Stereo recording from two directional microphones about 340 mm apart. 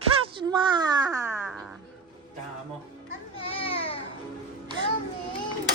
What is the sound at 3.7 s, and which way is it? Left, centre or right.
Music, centre.